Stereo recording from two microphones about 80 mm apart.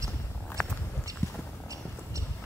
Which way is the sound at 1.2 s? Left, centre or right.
Left.